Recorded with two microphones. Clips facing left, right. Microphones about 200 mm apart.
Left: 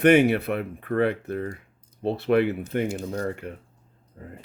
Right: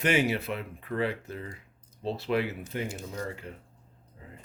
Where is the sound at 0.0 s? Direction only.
60° left (ahead or behind).